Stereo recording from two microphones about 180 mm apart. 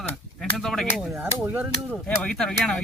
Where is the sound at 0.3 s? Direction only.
Centre (ahead or behind).